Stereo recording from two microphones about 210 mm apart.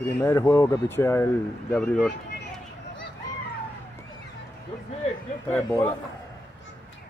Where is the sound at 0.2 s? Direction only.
15° left (ahead or behind).